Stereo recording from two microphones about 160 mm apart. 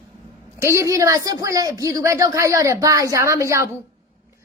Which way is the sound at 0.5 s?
15° right (ahead or behind).